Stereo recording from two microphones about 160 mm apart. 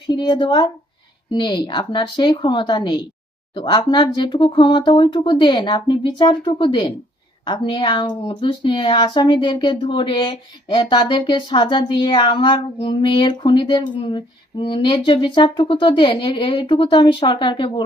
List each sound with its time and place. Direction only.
0.1 s speech: 30° left (ahead or behind)